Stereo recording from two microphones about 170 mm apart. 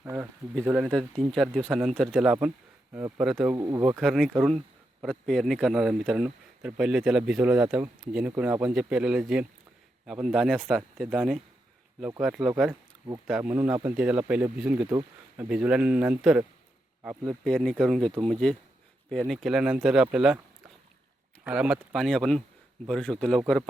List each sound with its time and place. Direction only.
0.0 s speech: 15° right (ahead or behind)
0.9 s speech: 5° left (ahead or behind)
3.5 s speech: 20° right (ahead or behind)
3.9 s speech: centre (ahead or behind)
21.4 s speech: 5° right (ahead or behind)